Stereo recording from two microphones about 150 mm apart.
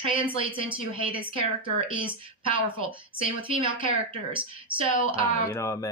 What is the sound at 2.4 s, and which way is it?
Speech, 35° right (ahead or behind).